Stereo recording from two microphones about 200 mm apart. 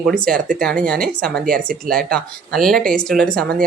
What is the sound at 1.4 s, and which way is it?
Speech, 45° right (ahead or behind).